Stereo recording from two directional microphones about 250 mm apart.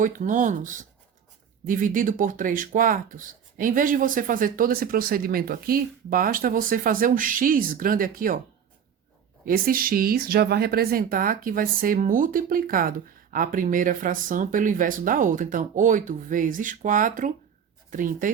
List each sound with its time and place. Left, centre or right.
0.0 s speech: right
9.5 s speech: right